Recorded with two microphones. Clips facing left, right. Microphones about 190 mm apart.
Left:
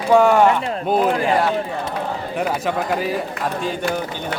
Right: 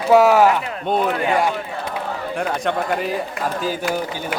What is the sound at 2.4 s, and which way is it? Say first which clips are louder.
Speech: left 1 dB; 5° left (ahead or behind).